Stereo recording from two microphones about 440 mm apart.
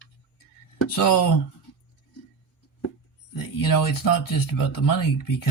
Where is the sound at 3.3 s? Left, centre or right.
Left.